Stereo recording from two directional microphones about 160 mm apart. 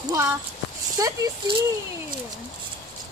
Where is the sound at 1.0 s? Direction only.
25° right (ahead or behind).